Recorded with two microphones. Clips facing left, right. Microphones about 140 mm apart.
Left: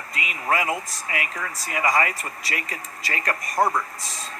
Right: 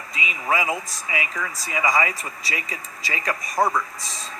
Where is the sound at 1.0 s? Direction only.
55° left (ahead or behind).